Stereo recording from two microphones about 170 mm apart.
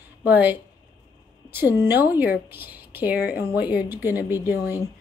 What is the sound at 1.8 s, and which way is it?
A woman's voice, 10° right (ahead or behind).